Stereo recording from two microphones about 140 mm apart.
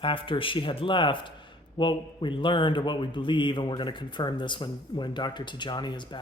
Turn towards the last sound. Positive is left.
turn(degrees=30)  # may be behind; listen again after turning